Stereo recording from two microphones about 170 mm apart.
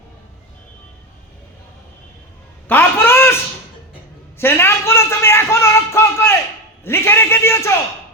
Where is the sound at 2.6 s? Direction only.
10° left (ahead or behind).